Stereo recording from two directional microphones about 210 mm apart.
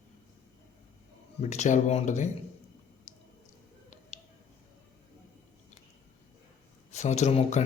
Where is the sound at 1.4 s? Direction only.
35° left (ahead or behind).